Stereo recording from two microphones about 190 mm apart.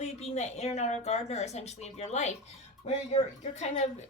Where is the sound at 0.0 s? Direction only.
35° left (ahead or behind).